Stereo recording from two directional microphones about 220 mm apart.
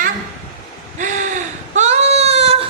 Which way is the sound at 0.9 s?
35° right (ahead or behind).